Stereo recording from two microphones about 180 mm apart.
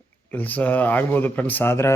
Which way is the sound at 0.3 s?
10° left (ahead or behind).